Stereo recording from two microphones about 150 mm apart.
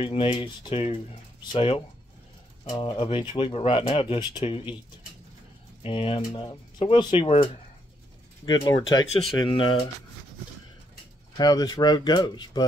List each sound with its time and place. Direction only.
0.0 s speech: 40° left (ahead or behind)
5.8 s speech: 40° left (ahead or behind)
8.5 s speech: 30° left (ahead or behind)
11.3 s speech: 25° left (ahead or behind)